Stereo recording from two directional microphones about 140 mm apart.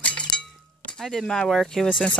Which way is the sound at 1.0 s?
Centre (ahead or behind).